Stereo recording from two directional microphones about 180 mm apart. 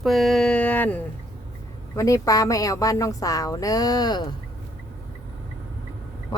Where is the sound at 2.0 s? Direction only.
20° left (ahead or behind).